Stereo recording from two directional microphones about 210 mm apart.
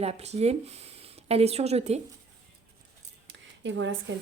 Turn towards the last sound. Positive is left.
turn(degrees=-60)  # may be behind; listen again after turning